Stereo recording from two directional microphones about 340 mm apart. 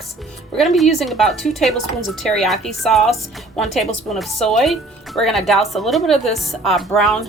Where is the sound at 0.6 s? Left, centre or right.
Centre.